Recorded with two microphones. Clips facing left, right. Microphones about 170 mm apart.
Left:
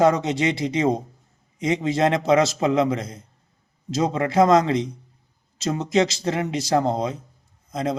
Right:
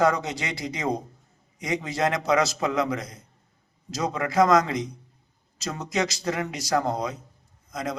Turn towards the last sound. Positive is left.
turn(degrees=25)  # may be behind; listen again after turning